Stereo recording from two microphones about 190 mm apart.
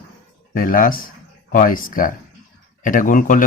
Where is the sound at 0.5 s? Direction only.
45° left (ahead or behind).